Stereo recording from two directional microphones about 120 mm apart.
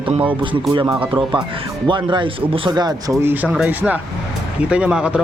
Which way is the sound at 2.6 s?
35° right (ahead or behind).